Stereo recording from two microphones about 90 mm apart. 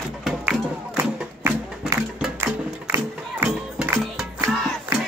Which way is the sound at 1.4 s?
25° right (ahead or behind).